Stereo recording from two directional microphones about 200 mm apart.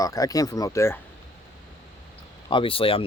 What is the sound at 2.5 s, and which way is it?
Speech, 25° left (ahead or behind).